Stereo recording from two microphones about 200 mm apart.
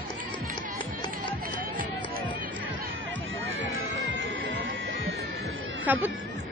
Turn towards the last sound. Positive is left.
turn(degrees=-10)  # may be behind; listen again after turning